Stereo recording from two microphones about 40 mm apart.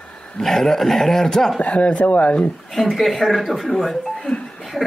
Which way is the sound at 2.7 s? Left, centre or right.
Centre.